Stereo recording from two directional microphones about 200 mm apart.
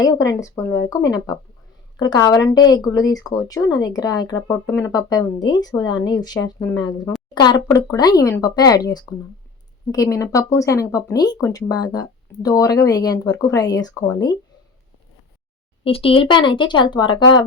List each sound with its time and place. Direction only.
0.0 s speech: 15° left (ahead or behind)
15.8 s speech: 30° left (ahead or behind)